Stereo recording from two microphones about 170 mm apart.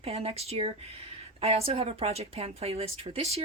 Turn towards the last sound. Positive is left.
turn(degrees=-35)  # may be behind; listen again after turning